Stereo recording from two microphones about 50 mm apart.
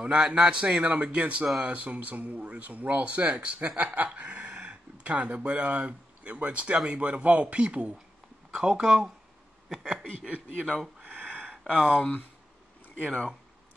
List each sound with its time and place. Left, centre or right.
0.0 s speech: centre
9.9 s speech: right
11.0 s a sound: right
11.7 s speech: right